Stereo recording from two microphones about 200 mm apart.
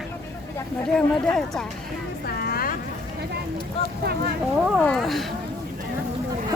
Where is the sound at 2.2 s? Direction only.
50° left (ahead or behind).